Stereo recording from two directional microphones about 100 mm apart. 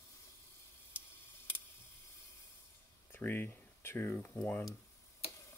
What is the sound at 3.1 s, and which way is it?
Speech, 20° left (ahead or behind).